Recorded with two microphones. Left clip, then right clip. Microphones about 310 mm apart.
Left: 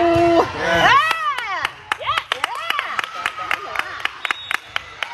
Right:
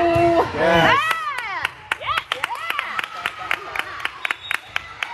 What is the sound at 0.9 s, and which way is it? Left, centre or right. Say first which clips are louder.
Clapping: left 3 dB; left.